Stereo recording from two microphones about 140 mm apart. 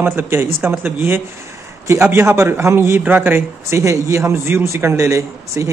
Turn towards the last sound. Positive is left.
turn(degrees=-20)  # may be behind; listen again after turning